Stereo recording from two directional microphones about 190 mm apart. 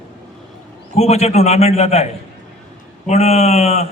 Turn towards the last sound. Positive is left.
turn(degrees=35)  # may be behind; listen again after turning